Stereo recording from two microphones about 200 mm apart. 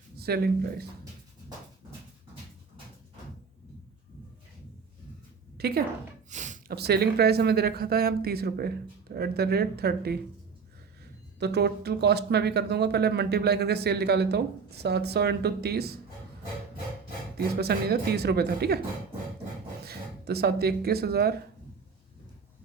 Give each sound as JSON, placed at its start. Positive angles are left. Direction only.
{"t": 0.2, "sound": "speech", "side_deg": -50}
{"t": 5.5, "sound": "a woman's voice", "side_deg": -50}
{"t": 6.3, "sound": "a sound", "side_deg": -35}
{"t": 6.7, "sound": "speech", "side_deg": -55}
{"t": 11.3, "sound": "speech", "side_deg": -55}
{"t": 17.3, "sound": "speech", "side_deg": -55}
{"t": 19.8, "sound": "speech", "side_deg": -55}